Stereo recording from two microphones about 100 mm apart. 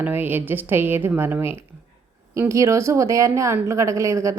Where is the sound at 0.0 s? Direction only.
20° right (ahead or behind).